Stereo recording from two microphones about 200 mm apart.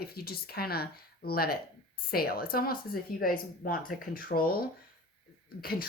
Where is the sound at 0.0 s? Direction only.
50° left (ahead or behind).